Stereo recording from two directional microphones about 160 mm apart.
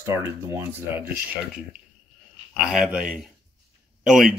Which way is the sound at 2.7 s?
5° right (ahead or behind).